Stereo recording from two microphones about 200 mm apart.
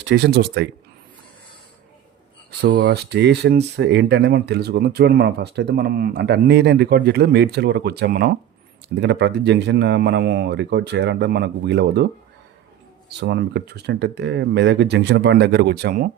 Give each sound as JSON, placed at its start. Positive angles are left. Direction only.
{"t": 0.0, "sound": "speech", "side_deg": -60}
{"t": 2.5, "sound": "speech", "side_deg": -50}
{"t": 2.8, "sound": "speech", "side_deg": -60}
{"t": 13.1, "sound": "speech", "side_deg": -55}